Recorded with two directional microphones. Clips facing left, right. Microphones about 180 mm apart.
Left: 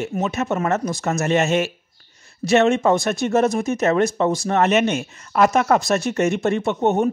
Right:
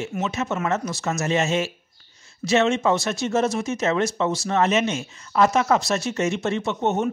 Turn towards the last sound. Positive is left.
turn(degrees=55)  # may be behind; listen again after turning